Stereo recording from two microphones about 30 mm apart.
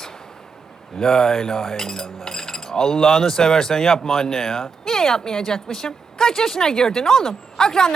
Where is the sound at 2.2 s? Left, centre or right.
Centre.